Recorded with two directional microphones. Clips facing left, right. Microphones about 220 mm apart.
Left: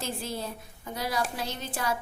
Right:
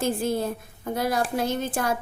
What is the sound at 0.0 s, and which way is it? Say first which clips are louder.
A woman's voice: right 9 dB; 50° right (ahead or behind).